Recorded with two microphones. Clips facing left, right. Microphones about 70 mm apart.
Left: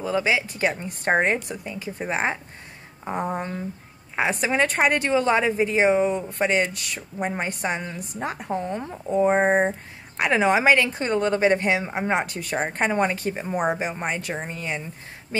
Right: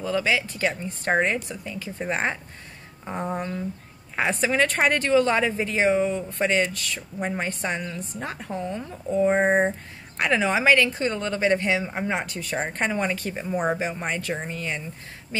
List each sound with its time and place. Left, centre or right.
0.0 s speech: centre
2.0 s speech: centre
4.5 s speech: left
8.5 s speech: left
8.9 s speech: centre